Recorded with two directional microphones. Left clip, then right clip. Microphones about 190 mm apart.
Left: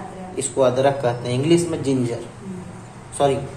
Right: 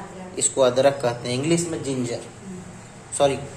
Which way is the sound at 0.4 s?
20° right (ahead or behind).